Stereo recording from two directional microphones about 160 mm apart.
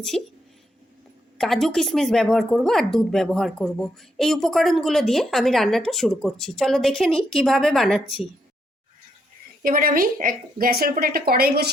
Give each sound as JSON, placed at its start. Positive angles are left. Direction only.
{"t": 0.1, "sound": "a woman's voice", "side_deg": 5}
{"t": 1.4, "sound": "a woman's voice", "side_deg": 0}
{"t": 9.6, "sound": "speech", "side_deg": -60}